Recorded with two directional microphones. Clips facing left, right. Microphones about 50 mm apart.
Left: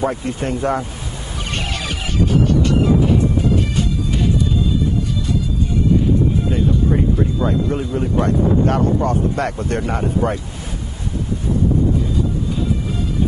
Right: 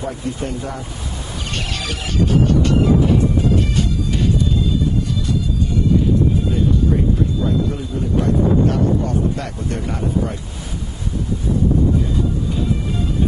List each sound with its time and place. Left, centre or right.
0.0 s speech: left
1.7 s music: centre
7.4 s speech: left